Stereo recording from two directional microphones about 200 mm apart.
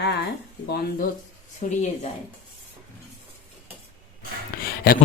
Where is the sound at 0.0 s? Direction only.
60° left (ahead or behind).